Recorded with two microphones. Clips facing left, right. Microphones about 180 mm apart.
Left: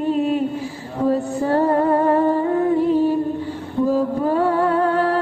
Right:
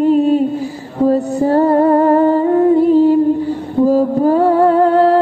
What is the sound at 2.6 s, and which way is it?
Music, 40° right (ahead or behind).